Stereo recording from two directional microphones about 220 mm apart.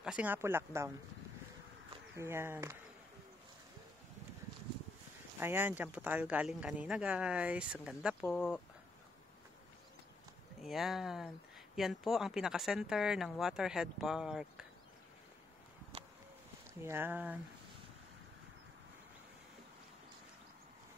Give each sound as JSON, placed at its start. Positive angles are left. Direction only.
{"t": 0.0, "sound": "speech", "side_deg": -5}
{"t": 2.1, "sound": "speech", "side_deg": -10}
{"t": 5.4, "sound": "speech", "side_deg": -10}
{"t": 10.6, "sound": "speech", "side_deg": 0}
{"t": 16.8, "sound": "speech", "side_deg": -10}